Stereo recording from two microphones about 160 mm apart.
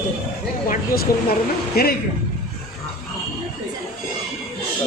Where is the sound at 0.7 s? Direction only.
70° left (ahead or behind).